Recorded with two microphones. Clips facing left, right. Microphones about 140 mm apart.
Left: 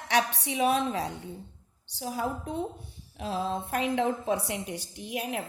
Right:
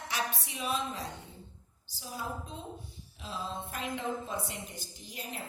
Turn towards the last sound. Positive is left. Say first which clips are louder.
# left 10 dB
turn(degrees=70)  # may be behind; listen again after turning